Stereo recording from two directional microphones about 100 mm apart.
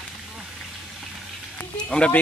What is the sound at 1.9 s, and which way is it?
Speech, 10° left (ahead or behind).